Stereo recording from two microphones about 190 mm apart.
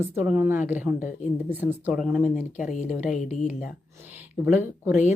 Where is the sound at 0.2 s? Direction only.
10° right (ahead or behind).